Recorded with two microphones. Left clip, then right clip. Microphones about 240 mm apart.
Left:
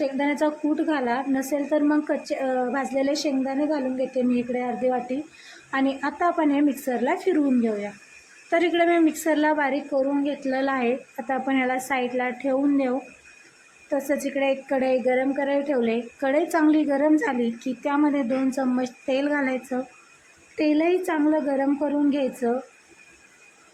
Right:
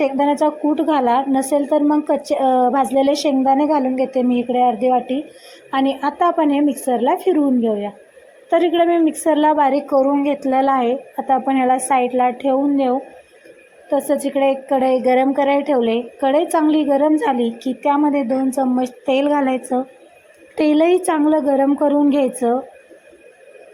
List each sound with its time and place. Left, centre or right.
0.0 s a woman's voice: centre